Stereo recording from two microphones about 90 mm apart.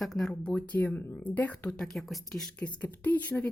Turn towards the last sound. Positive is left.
turn(degrees=20)  # may be behind; listen again after turning